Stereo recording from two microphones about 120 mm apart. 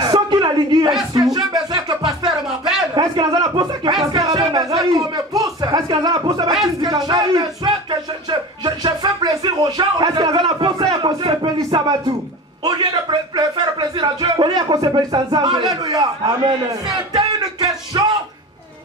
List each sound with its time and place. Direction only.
0.0 s a sound: 35° right (ahead or behind)
1.3 s music: 35° right (ahead or behind)
3.0 s a sound: 30° right (ahead or behind)
6.8 s speech: 35° right (ahead or behind)
11.1 s speech: 55° right (ahead or behind)
11.4 s speech: 35° right (ahead or behind)
17.1 s music: 40° right (ahead or behind)